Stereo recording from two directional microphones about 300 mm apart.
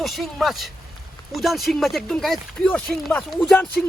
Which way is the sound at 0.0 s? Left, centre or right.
Centre.